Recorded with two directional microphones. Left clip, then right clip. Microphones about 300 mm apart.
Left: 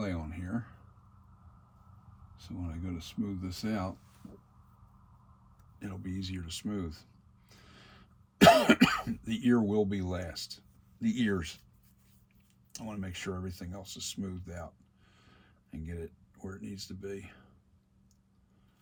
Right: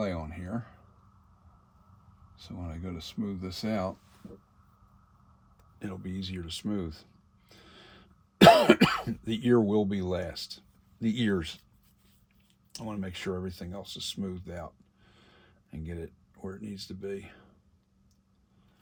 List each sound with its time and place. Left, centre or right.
0.0 s a sound: centre
2.6 s speech: right
5.8 s speech: right
7.5 s cough: right
9.2 s speech: right
12.7 s speech: right